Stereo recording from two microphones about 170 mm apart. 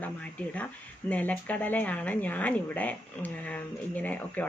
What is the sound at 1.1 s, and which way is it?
Speech, 10° left (ahead or behind).